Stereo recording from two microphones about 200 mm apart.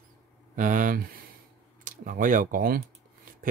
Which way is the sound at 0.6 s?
40° right (ahead or behind).